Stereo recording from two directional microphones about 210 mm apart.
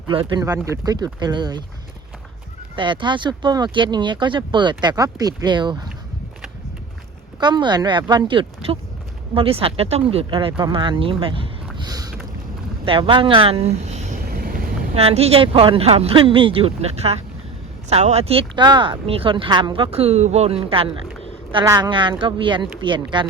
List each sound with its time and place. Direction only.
0.1 s speech: 25° right (ahead or behind)
2.7 s speech: 20° right (ahead or behind)
7.3 s speech: 20° right (ahead or behind)
11.8 s boat: 20° right (ahead or behind)
12.8 s speech: 25° right (ahead or behind)
14.3 s vehicle: 45° right (ahead or behind)
14.9 s speech: 30° right (ahead or behind)